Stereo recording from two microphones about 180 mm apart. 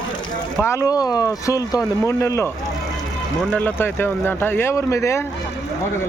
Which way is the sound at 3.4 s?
5° left (ahead or behind).